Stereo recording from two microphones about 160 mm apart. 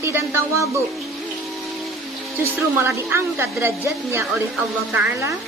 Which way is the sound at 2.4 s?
15° right (ahead or behind).